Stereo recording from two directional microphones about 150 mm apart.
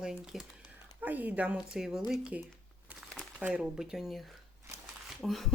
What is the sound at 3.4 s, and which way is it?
Speech, 5° right (ahead or behind).